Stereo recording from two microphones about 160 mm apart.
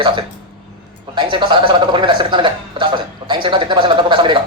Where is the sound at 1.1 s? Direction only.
30° right (ahead or behind).